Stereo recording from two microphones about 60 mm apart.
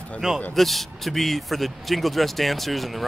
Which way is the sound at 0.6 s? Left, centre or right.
Centre.